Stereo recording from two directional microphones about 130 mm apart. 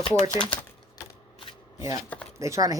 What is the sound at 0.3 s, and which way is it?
Speech, 40° left (ahead or behind).